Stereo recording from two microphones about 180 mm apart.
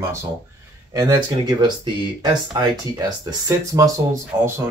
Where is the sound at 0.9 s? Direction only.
20° right (ahead or behind).